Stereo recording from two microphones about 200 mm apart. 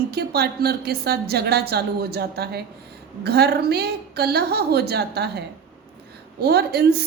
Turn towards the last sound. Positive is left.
turn(degrees=-55)  # may be behind; listen again after turning